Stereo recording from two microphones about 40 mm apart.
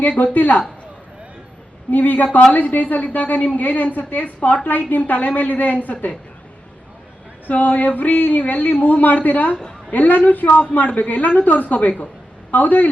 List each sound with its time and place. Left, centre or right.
0.3 s speech: left
1.9 s speech: left
7.4 s speech: left